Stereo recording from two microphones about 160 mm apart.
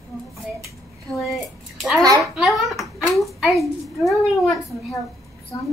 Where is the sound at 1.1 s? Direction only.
Centre (ahead or behind).